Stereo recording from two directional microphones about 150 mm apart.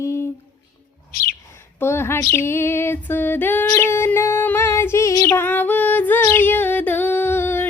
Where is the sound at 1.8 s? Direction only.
15° left (ahead or behind).